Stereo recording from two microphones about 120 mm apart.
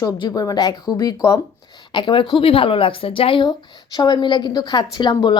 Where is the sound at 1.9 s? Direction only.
45° left (ahead or behind).